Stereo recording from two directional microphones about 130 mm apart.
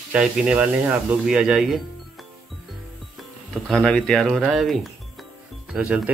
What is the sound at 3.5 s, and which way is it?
Speech, 5° left (ahead or behind).